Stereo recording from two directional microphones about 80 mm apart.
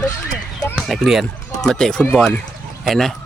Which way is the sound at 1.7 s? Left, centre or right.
Centre.